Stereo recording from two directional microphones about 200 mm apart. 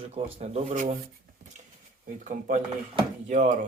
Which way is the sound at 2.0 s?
40° right (ahead or behind).